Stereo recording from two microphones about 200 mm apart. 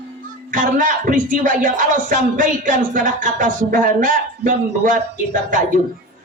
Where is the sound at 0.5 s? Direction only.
40° right (ahead or behind).